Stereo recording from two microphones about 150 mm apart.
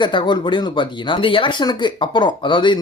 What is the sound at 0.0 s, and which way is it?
Speech, 30° left (ahead or behind).